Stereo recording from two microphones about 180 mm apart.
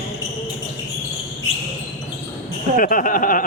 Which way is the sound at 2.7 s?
50° left (ahead or behind).